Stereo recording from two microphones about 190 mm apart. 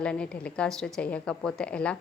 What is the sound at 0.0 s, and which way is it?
A woman's voice, 5° left (ahead or behind).